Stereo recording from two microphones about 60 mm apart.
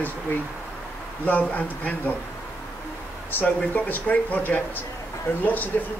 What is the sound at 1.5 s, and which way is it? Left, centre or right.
Speech, left.